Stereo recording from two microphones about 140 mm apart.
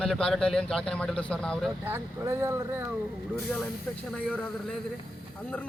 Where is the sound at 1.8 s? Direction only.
15° right (ahead or behind).